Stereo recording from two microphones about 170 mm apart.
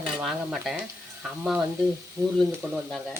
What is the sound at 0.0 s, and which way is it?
Speech, centre (ahead or behind).